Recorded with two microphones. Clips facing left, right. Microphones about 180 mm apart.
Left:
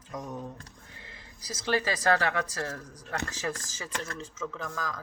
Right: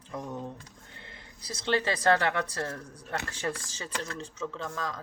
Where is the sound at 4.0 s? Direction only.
30° right (ahead or behind).